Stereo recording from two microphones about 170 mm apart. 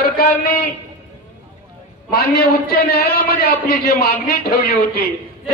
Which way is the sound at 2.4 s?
65° left (ahead or behind).